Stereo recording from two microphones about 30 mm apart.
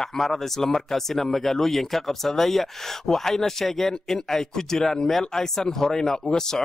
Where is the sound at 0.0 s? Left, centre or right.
Centre.